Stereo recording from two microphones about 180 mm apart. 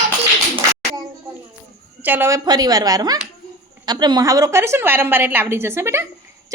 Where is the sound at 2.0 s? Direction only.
10° right (ahead or behind).